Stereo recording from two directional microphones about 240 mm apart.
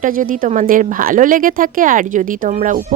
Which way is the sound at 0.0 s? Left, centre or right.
Right.